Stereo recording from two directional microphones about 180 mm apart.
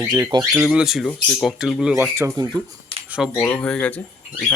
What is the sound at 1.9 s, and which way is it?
Speech, 15° right (ahead or behind).